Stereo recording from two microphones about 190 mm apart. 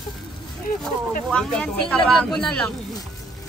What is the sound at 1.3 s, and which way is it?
Speech, 5° left (ahead or behind).